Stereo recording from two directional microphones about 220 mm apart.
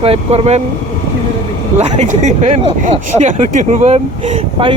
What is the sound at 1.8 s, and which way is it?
Speech, 30° right (ahead or behind).